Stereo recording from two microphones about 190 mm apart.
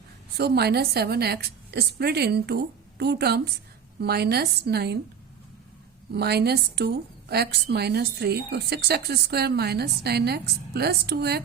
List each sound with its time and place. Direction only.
0.3 s a woman's voice: 60° right (ahead or behind)
6.1 s a woman's voice: 60° right (ahead or behind)